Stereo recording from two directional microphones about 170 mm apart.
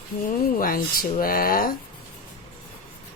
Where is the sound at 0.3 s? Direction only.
55° left (ahead or behind).